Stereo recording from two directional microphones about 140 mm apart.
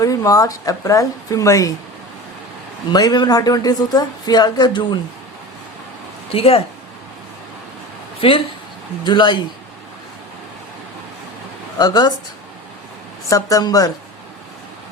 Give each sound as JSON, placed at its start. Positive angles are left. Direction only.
{"t": 0.0, "sound": "a woman's voice", "side_deg": 25}
{"t": 2.9, "sound": "a woman's voice", "side_deg": 30}
{"t": 6.3, "sound": "speech", "side_deg": 45}
{"t": 8.2, "sound": "a man's voice", "side_deg": 40}
{"t": 11.8, "sound": "a woman's voice", "side_deg": 30}
{"t": 13.3, "sound": "a woman's voice", "side_deg": 25}